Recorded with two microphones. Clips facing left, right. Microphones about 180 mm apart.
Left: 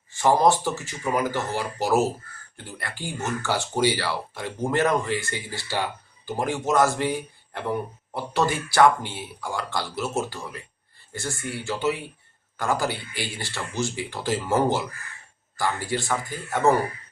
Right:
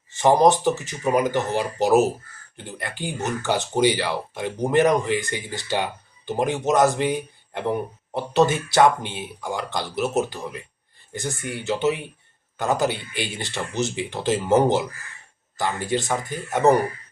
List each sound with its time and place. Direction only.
0.1 s speech: 20° right (ahead or behind)